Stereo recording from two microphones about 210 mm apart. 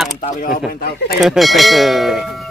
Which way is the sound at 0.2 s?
45° left (ahead or behind).